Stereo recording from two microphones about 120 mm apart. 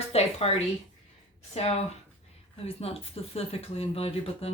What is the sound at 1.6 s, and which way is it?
Speech, 60° left (ahead or behind).